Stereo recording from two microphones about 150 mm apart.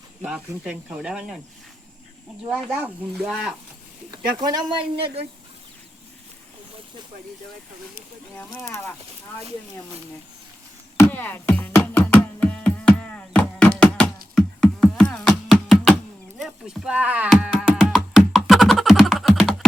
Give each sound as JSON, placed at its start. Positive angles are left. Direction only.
{"t": 0.2, "sound": "speech", "side_deg": -5}
{"t": 2.5, "sound": "speech", "side_deg": 5}
{"t": 4.1, "sound": "speech", "side_deg": -30}
{"t": 10.9, "sound": "music", "side_deg": 10}
{"t": 14.3, "sound": "a sound", "side_deg": 5}
{"t": 16.4, "sound": "speech", "side_deg": -5}
{"t": 17.8, "sound": "music", "side_deg": -5}